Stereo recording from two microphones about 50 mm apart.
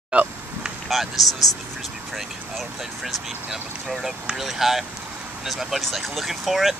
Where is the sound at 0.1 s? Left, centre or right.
Right.